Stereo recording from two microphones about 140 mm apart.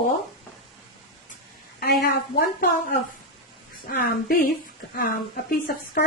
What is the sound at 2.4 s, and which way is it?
A woman's voice, 90° left.